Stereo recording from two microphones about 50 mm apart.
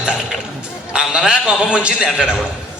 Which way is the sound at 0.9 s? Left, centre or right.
Centre.